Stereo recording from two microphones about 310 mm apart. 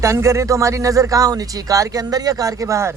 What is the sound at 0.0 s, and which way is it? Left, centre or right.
Speech, centre.